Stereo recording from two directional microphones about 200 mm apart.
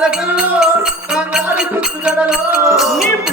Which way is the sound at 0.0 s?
5° right (ahead or behind).